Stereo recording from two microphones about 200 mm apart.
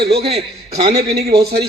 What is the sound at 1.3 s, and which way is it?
Speech, 55° right (ahead or behind).